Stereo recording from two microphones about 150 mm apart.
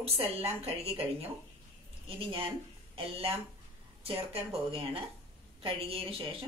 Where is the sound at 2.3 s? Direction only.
35° right (ahead or behind).